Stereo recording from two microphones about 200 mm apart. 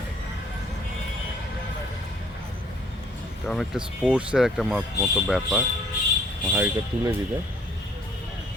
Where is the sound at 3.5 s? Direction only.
Centre (ahead or behind).